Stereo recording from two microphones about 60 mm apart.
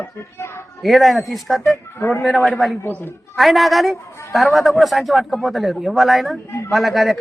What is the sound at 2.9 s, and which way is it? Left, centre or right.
Speech, left.